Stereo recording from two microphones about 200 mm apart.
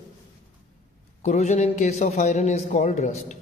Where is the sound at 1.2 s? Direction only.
35° left (ahead or behind).